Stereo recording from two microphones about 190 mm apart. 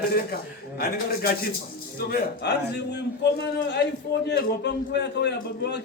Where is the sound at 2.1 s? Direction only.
60° left (ahead or behind).